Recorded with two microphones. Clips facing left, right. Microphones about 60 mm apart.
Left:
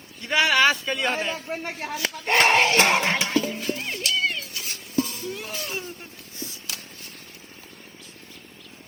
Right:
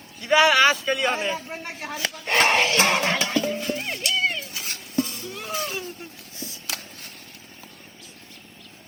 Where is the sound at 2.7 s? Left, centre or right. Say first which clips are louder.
Left 1 dB; left.